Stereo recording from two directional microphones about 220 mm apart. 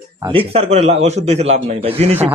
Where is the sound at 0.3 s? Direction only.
25° right (ahead or behind).